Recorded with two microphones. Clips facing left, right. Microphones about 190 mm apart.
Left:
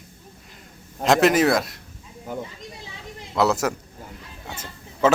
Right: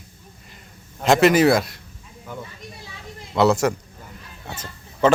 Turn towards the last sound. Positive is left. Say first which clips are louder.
# right 1 dB
turn(degrees=5)  # may be behind; listen again after turning